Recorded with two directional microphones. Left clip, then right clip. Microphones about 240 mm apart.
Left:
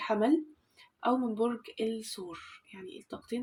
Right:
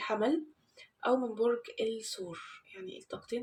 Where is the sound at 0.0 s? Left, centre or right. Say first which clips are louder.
Left 3 dB; left.